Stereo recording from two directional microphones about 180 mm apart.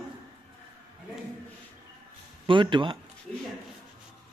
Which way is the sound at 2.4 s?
25° right (ahead or behind).